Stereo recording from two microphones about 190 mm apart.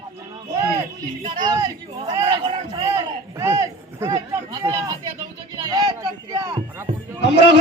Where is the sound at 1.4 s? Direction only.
20° right (ahead or behind).